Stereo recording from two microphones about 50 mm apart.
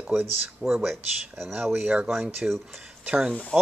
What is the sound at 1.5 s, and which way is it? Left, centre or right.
Speech, right.